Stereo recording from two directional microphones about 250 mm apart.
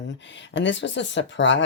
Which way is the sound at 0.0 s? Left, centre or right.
Left.